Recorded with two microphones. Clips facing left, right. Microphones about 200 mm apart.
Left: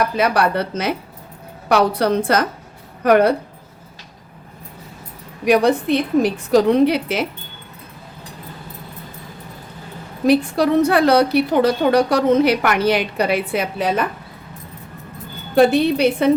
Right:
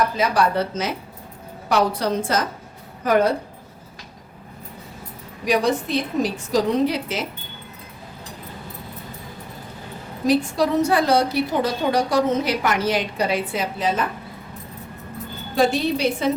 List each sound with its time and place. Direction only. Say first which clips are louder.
0.2 s a woman's voice: left 2 dB; 65° left (ahead or behind)
5.5 s a woman's voice: left 6 dB; 60° left (ahead or behind)
10.2 s a woman's voice: left 4 dB; 60° left (ahead or behind)
15.5 s a woman's voice: left 6 dB; 60° left (ahead or behind)